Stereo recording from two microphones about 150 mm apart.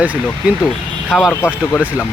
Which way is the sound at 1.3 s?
15° left (ahead or behind).